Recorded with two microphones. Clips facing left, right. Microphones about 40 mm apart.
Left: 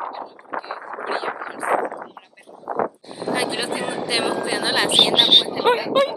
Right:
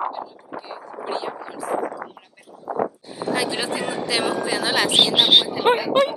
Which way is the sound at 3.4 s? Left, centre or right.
Left.